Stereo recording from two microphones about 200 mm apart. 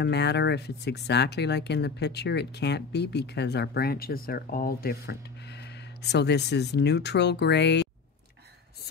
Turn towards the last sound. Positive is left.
turn(degrees=60)  # may be behind; listen again after turning